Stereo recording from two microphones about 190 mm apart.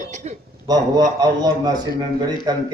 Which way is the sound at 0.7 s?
20° right (ahead or behind).